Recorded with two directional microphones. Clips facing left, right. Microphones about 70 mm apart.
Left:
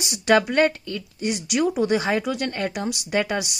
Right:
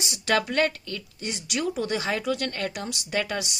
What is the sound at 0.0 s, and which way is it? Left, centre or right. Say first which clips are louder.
Speech: left 6 dB; left.